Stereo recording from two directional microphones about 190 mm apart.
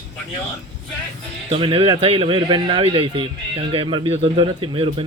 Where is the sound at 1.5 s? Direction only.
30° right (ahead or behind).